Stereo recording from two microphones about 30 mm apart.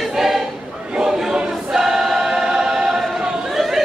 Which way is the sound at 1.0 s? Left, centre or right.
Centre.